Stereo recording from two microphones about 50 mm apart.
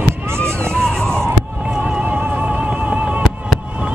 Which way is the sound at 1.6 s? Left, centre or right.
Right.